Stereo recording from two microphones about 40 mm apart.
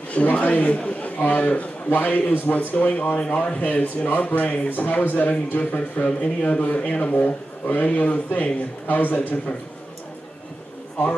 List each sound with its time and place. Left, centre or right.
0.1 s a man's voice: left
5.9 s speech: left